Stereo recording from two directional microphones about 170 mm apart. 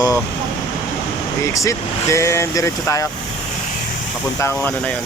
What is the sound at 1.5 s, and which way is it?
Speech, 15° left (ahead or behind).